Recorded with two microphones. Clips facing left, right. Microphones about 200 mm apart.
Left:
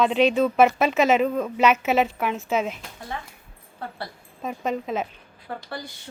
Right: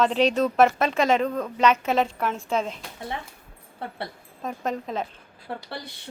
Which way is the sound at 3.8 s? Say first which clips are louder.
Right 1 dB; 25° right (ahead or behind).